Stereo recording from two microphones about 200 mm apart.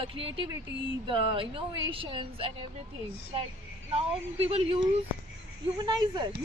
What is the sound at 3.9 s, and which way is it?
A woman's voice, 30° right (ahead or behind).